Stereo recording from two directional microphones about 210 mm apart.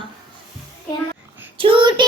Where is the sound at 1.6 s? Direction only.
25° right (ahead or behind).